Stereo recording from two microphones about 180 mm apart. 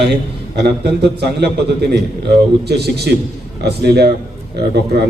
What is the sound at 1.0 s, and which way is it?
A man's voice, 65° right (ahead or behind).